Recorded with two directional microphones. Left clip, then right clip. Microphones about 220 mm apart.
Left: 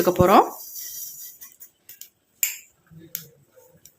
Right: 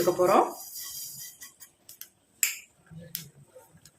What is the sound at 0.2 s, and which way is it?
Speech, 50° left (ahead or behind).